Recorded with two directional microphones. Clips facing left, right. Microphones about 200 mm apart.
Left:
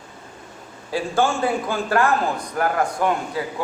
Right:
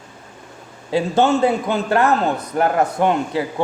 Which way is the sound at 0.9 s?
25° right (ahead or behind).